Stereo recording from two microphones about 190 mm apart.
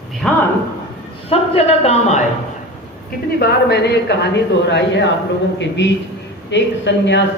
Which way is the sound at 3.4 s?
60° left (ahead or behind).